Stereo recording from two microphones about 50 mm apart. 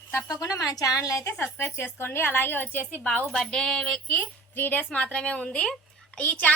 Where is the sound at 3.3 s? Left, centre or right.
Centre.